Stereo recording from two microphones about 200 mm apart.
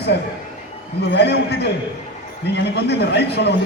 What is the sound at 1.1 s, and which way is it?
Speech, 55° left (ahead or behind).